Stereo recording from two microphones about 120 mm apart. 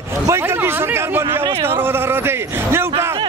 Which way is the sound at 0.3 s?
20° right (ahead or behind).